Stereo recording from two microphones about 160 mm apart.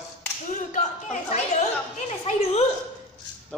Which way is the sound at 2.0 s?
45° left (ahead or behind).